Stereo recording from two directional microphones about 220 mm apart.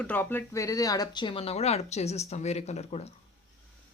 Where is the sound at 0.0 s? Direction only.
10° left (ahead or behind); by 3.1 s 30° left (ahead or behind).